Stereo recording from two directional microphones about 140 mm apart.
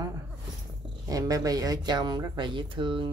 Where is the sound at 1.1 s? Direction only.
25° right (ahead or behind).